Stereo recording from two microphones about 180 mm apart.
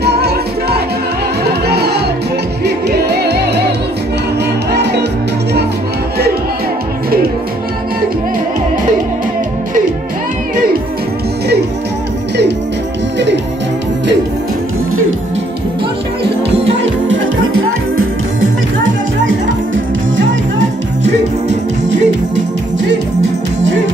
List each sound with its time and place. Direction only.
0.0 s music: 65° right (ahead or behind)
20.2 s music: 90° right
21.0 s music: 40° right (ahead or behind)